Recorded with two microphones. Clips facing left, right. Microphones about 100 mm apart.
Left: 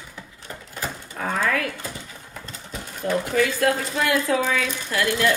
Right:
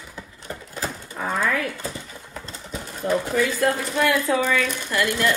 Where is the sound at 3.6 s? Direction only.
Centre (ahead or behind).